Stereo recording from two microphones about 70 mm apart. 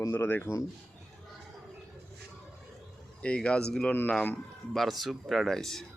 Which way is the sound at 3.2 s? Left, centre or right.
Centre.